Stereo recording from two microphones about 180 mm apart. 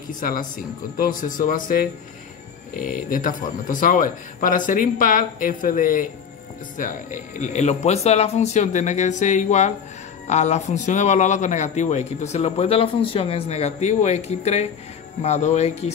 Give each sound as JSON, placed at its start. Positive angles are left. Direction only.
{"t": 0.2, "sound": "a man's voice", "side_deg": 50}